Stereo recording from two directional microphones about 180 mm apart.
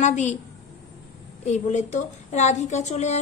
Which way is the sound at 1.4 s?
40° left (ahead or behind).